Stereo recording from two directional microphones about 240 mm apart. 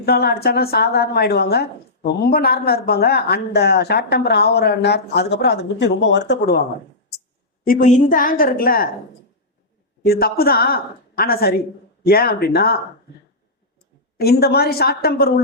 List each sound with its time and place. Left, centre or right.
0.0 s a woman's voice: left
7.6 s a woman's voice: left
10.0 s a woman's voice: left
14.2 s a woman's voice: left